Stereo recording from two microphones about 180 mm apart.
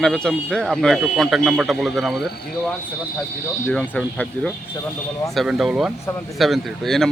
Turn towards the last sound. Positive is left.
turn(degrees=0)  # may be behind; listen again after turning